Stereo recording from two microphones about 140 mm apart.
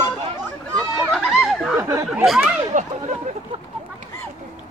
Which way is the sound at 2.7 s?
65° right (ahead or behind).